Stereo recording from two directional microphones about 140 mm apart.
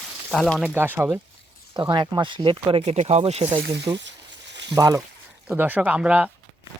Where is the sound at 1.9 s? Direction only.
35° right (ahead or behind).